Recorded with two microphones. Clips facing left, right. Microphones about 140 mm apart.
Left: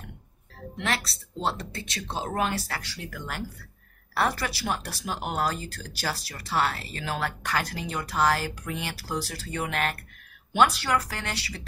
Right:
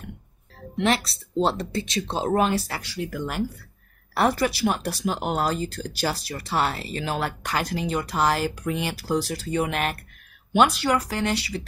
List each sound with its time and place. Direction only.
0.7 s speech: 20° right (ahead or behind)